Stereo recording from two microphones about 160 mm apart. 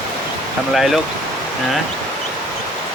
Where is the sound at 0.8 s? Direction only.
Centre (ahead or behind).